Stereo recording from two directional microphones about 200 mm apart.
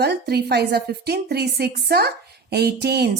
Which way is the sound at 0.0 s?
55° right (ahead or behind).